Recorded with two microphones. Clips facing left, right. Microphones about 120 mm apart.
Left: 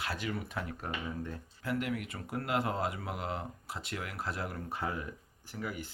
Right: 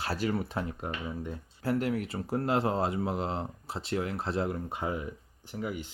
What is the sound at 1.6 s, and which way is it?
Speech, 35° right (ahead or behind).